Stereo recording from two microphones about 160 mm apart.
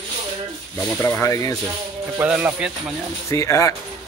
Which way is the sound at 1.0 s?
15° left (ahead or behind).